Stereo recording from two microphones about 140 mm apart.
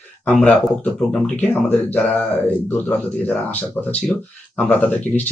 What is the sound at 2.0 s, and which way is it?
Speech, 10° left (ahead or behind).